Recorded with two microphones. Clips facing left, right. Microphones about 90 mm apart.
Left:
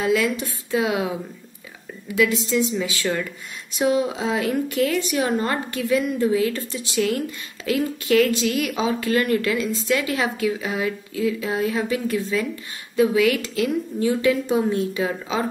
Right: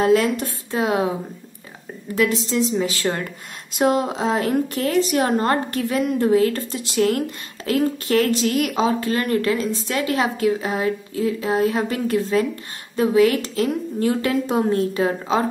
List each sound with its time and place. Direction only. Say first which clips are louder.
0.0 s a woman's voice: right 4 dB; 45° right (ahead or behind)
2.1 s a woman's voice: even; 35° right (ahead or behind)